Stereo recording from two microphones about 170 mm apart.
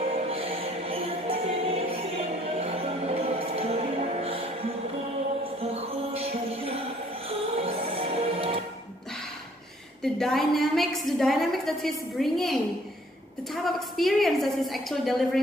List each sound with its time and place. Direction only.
0.1 s music: 35° right (ahead or behind)
5.6 s music: 35° right (ahead or behind)
10.1 s a woman's voice: centre (ahead or behind)